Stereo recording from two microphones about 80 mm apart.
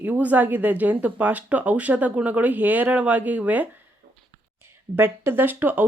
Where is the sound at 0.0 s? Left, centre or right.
Right.